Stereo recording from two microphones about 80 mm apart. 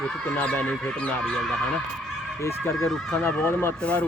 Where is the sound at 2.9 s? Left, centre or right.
Centre.